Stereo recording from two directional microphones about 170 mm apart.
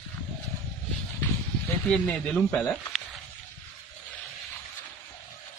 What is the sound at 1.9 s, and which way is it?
Speech, 5° left (ahead or behind).